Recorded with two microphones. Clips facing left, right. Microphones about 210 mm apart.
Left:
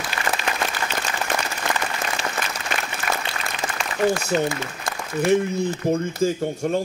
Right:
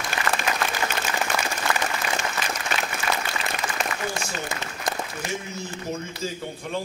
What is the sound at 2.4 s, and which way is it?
Applause, 50° left (ahead or behind).